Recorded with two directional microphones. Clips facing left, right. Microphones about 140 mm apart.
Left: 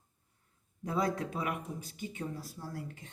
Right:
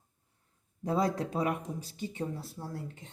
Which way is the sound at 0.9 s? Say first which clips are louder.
Right 3 dB; 30° right (ahead or behind).